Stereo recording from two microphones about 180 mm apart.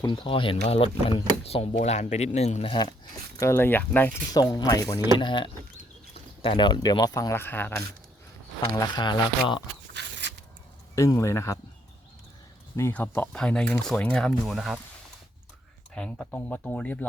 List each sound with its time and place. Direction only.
0.0 s speech: 25° left (ahead or behind)
3.4 s speech: 10° left (ahead or behind)
9.9 s biting: 75° right (ahead or behind)
10.9 s speech: 15° left (ahead or behind)
12.7 s speech: 10° left (ahead or behind)
16.0 s speech: 5° left (ahead or behind)